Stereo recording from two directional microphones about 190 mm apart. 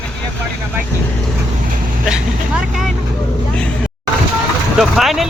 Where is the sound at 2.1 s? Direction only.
5° right (ahead or behind).